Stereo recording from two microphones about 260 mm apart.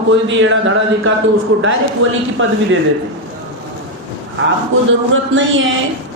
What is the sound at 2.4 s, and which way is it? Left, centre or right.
Speech, right.